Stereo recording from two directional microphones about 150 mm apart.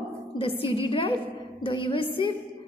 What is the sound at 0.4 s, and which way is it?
A woman's voice, 35° left (ahead or behind).